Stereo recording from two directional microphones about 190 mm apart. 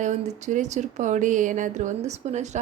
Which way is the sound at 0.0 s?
40° right (ahead or behind).